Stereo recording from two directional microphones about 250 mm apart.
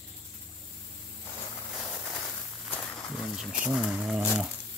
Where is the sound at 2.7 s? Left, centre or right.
Centre.